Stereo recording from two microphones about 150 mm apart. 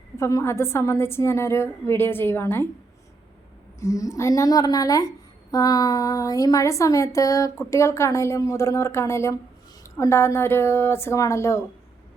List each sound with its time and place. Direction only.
0.2 s a woman's voice: 20° left (ahead or behind)
3.8 s a woman's voice: 20° left (ahead or behind)